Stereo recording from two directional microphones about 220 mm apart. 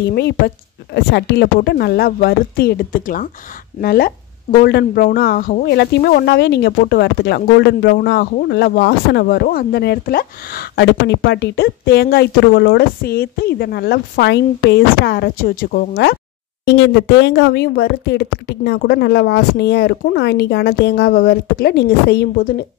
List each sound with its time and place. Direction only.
0.0 s speech: 50° left (ahead or behind)